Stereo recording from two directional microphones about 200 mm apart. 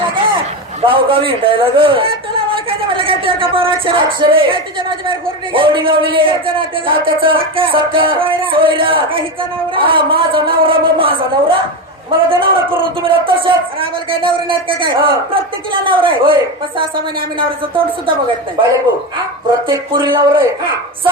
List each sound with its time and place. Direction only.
0.8 s speech: 25° right (ahead or behind)
5.5 s speech: 25° right (ahead or behind)
19.6 s speech: 25° right (ahead or behind)